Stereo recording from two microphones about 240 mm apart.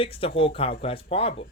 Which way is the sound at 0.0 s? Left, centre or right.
Left.